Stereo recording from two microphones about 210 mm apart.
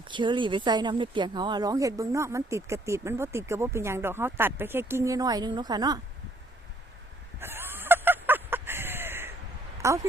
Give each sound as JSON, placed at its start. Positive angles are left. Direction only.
{"t": 0.1, "sound": "speech", "side_deg": -20}
{"t": 7.3, "sound": "a sound", "side_deg": -10}
{"t": 9.8, "sound": "speech", "side_deg": -15}